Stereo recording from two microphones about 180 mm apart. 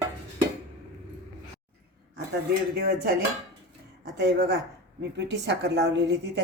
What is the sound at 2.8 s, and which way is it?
Speech, 65° right (ahead or behind).